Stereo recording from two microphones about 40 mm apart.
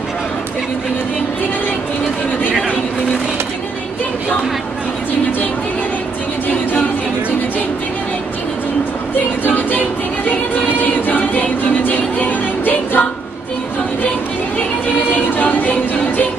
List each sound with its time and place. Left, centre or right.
9.5 s music: left
15.0 s music: left